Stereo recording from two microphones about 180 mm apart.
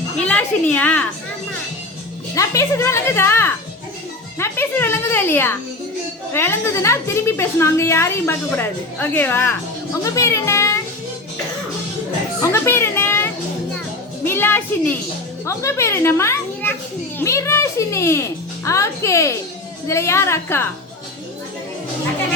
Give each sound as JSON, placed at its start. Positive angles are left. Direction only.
{"t": 0.3, "sound": "a woman's voice", "side_deg": 10}
{"t": 2.3, "sound": "a woman's voice", "side_deg": 15}
{"t": 12.4, "sound": "children playing", "side_deg": 15}
{"t": 14.3, "sound": "a woman's voice", "side_deg": 10}